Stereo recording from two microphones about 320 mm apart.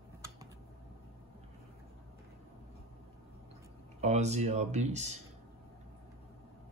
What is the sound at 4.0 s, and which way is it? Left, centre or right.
Speech, right.